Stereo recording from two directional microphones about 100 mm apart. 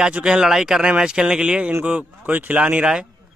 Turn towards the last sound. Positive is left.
turn(degrees=-10)  # may be behind; listen again after turning